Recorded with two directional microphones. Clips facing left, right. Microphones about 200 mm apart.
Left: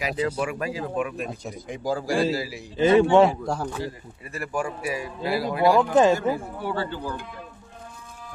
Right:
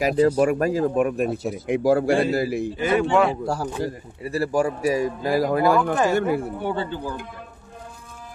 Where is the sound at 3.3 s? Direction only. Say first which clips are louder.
Right 2 dB; 5° right (ahead or behind).